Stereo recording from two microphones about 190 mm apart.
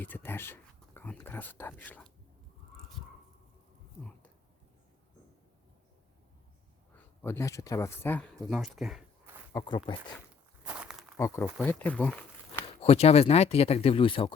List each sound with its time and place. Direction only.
0.0 s speech: 10° left (ahead or behind)
6.9 s speech: 10° left (ahead or behind)
9.5 s speech: 20° left (ahead or behind)
10.6 s a sound: 5° right (ahead or behind)
11.4 s speech: centre (ahead or behind)
12.8 s speech: 35° left (ahead or behind)